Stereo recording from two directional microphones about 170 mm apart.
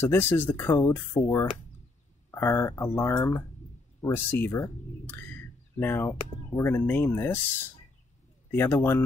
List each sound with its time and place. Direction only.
0.0 s speech: 15° left (ahead or behind)
8.5 s speech: 15° left (ahead or behind)